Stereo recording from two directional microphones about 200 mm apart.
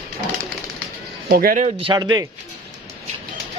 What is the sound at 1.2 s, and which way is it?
Speech, 45° right (ahead or behind).